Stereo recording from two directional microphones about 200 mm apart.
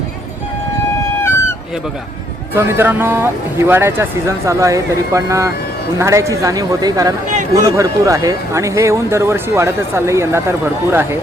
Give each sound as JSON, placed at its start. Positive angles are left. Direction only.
{"t": 2.6, "sound": "speech", "side_deg": -10}